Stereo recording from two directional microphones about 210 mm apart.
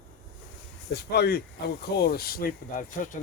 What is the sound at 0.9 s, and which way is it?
Speech, 50° left (ahead or behind).